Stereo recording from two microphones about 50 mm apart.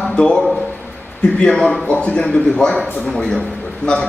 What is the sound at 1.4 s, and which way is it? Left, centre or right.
A man's voice, centre.